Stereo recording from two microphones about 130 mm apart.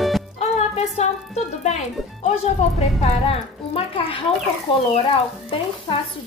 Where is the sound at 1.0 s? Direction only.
60° left (ahead or behind).